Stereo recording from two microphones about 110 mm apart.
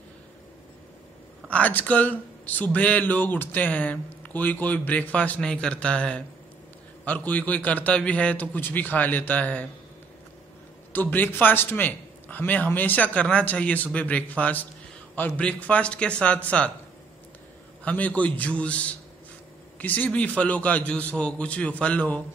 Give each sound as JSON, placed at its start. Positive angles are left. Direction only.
{"t": 1.5, "sound": "speech", "side_deg": 15}
{"t": 10.9, "sound": "speech", "side_deg": 15}
{"t": 17.8, "sound": "speech", "side_deg": 15}